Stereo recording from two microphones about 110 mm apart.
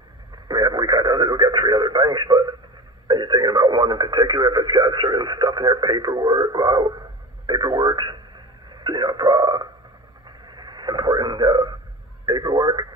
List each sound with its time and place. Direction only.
0.5 s radio: 40° right (ahead or behind)
3.1 s speech: 40° right (ahead or behind)
10.4 s a sound: 40° right (ahead or behind)
12.3 s speech: 40° right (ahead or behind)